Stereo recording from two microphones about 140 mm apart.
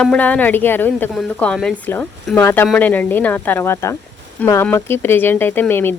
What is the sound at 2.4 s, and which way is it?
Speech, 15° left (ahead or behind).